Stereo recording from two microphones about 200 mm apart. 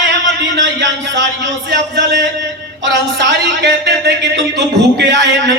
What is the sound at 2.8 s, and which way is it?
A man's voice, 65° right (ahead or behind).